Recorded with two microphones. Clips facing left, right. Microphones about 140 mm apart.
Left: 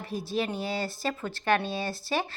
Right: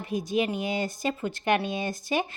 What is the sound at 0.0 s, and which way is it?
Speech, 15° right (ahead or behind).